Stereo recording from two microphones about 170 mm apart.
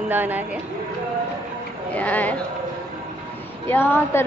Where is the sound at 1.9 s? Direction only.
10° left (ahead or behind).